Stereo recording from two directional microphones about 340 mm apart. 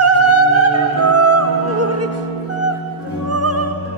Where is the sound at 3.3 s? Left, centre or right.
Right.